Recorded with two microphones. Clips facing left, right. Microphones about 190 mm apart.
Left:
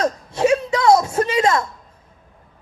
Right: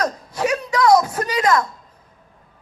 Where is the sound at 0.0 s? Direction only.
25° left (ahead or behind).